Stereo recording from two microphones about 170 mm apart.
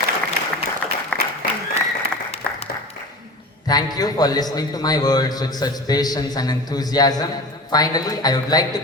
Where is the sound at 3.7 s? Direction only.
25° left (ahead or behind).